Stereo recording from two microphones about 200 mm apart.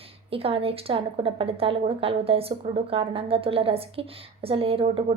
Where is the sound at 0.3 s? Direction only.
30° right (ahead or behind).